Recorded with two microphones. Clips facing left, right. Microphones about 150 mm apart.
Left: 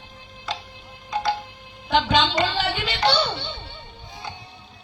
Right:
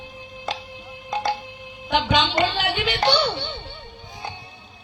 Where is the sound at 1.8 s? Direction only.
15° right (ahead or behind).